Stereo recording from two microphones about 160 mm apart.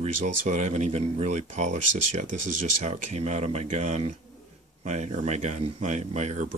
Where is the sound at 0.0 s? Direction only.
45° right (ahead or behind).